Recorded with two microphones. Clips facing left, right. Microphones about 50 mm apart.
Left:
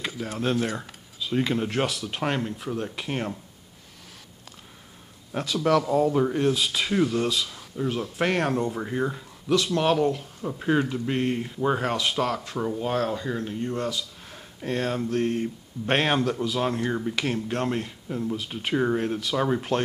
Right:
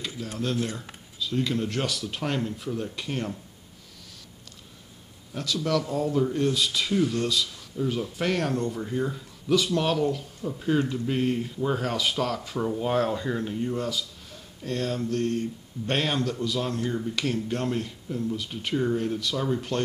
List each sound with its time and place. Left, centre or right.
0.0 s a man's voice: left; by 3.1 s centre
3.1 s speech: centre
5.4 s a man's voice: left
9.5 s a man's voice: centre
10.6 s speech: left
11.1 s a man's voice: centre
11.4 s speech: centre
11.9 s a man's voice: centre
14.3 s speech: left
15.9 s speech: left
16.2 s a man's voice: centre
16.8 s speech: left
17.1 s speech: left